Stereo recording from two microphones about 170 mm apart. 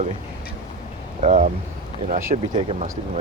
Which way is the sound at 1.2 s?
45° right (ahead or behind).